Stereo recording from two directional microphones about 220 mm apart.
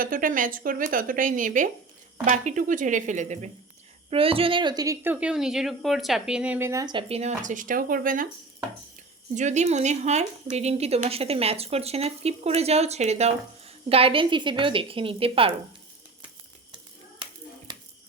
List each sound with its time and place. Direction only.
0.0 s speech: 40° right (ahead or behind)
9.3 s speech: 35° right (ahead or behind)